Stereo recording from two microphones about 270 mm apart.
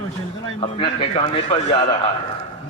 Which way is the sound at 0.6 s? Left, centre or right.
Centre.